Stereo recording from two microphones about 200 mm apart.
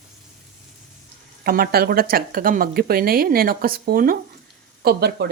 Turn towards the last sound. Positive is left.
turn(degrees=-55)  # may be behind; listen again after turning